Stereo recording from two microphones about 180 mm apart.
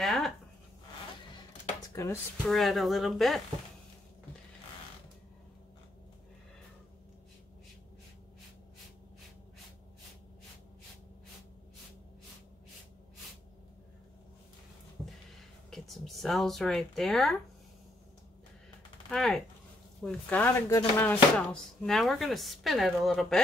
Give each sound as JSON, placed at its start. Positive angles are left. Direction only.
{"t": 0.0, "sound": "a sound", "side_deg": 0}
{"t": 2.4, "sound": "speech", "side_deg": 0}
{"t": 15.7, "sound": "speech", "side_deg": 0}
{"t": 19.0, "sound": "speech", "side_deg": 0}